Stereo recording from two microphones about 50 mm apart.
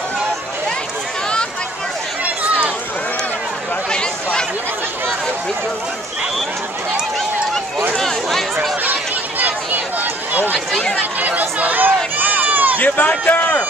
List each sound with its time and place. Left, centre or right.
3.9 s chatter: centre
7.9 s a sound: centre
10.3 s run: right
12.8 s a man's voice: left